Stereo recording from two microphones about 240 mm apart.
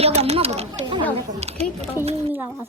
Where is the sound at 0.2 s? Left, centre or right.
Right.